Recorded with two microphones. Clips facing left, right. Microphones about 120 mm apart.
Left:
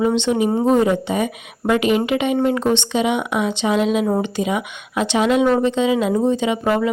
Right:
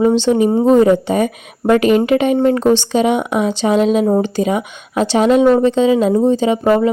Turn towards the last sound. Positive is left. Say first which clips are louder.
# right 5 dB
turn(degrees=-35)  # may be behind; listen again after turning